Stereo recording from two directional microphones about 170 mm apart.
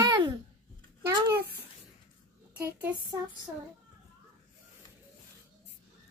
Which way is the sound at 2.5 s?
10° right (ahead or behind).